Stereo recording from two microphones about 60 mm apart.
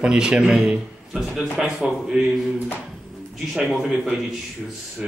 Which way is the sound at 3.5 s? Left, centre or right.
Centre.